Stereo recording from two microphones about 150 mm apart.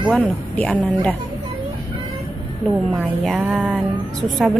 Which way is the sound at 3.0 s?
5° right (ahead or behind).